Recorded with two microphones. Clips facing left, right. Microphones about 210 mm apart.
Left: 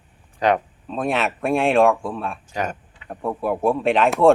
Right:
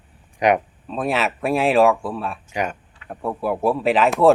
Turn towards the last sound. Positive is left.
turn(degrees=0)  # may be behind; listen again after turning